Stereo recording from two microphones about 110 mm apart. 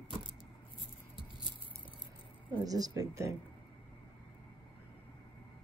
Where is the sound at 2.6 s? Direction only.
35° right (ahead or behind).